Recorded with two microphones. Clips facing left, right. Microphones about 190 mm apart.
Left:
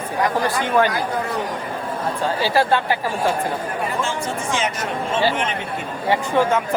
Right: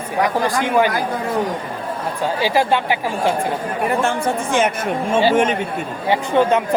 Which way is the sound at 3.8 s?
60° right (ahead or behind).